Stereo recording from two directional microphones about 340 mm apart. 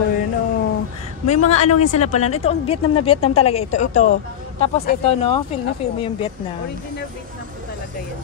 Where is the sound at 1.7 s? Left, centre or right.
Left.